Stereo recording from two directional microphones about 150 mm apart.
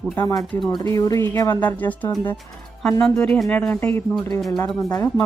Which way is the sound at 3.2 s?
5° left (ahead or behind).